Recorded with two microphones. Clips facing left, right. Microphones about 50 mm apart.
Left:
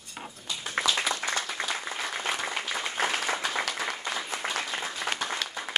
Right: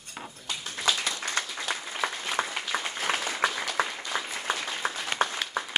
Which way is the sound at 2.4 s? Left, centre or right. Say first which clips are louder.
Right 3 dB; right.